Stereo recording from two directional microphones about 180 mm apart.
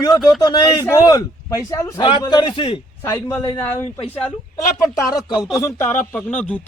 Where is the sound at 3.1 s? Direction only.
15° left (ahead or behind).